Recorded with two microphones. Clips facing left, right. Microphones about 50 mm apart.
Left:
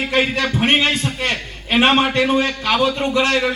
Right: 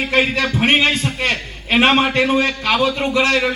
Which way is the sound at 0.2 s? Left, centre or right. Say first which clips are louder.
Right 1 dB; centre.